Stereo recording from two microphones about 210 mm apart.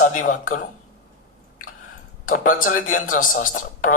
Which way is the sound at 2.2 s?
40° left (ahead or behind).